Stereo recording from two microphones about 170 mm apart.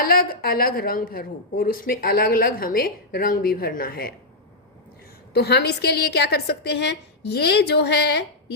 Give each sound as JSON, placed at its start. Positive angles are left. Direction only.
{"t": 0.0, "sound": "speech", "side_deg": 60}
{"t": 5.3, "sound": "a woman's voice", "side_deg": 75}